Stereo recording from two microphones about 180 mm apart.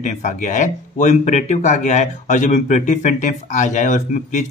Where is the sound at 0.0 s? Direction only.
45° left (ahead or behind).